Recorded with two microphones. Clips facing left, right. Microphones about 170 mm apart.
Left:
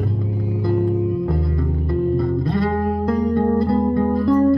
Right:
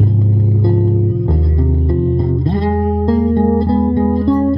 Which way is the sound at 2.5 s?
25° right (ahead or behind).